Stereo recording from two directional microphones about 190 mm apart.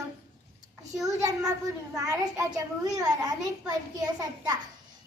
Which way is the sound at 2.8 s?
20° right (ahead or behind).